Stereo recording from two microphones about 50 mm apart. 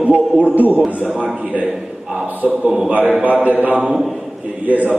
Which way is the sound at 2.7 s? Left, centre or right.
Centre.